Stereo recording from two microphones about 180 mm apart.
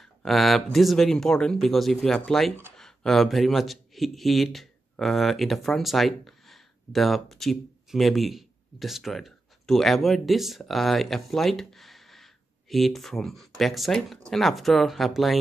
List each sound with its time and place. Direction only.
0.0 s a man's voice: centre (ahead or behind)